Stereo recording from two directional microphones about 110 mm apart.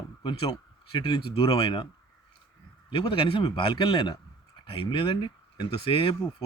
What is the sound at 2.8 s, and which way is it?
Speech, 50° left (ahead or behind).